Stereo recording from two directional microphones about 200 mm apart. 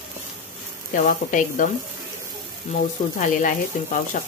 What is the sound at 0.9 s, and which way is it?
Speech, 40° left (ahead or behind).